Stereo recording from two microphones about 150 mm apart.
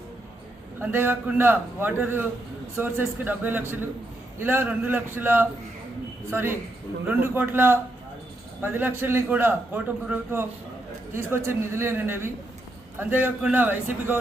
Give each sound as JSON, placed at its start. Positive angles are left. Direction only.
{"t": 0.8, "sound": "a man's voice", "side_deg": -15}